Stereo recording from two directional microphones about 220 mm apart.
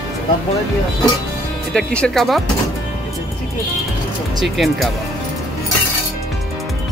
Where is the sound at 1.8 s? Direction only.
5° left (ahead or behind).